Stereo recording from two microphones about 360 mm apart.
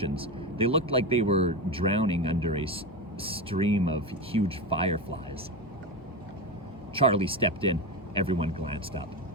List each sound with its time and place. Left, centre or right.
0.0 s speech: centre
6.9 s speech: centre